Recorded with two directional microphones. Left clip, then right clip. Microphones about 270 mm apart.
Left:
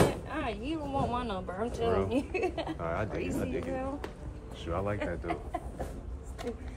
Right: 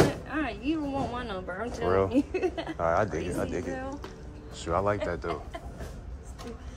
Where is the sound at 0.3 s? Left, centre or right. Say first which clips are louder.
Right 4 dB; right.